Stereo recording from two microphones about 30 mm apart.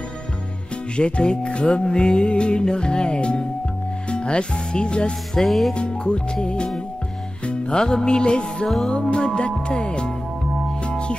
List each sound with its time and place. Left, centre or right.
0.9 s music: left
1.8 s music: left
5.4 s music: centre
5.8 s music: left
7.7 s music: left